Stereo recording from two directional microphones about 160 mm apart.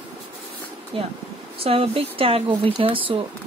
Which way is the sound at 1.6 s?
35° right (ahead or behind).